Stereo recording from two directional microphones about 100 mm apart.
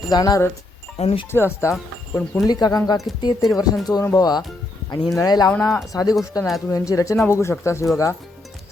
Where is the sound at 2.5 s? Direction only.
40° left (ahead or behind).